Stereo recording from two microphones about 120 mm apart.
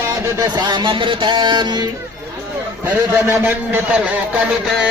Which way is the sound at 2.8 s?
15° right (ahead or behind).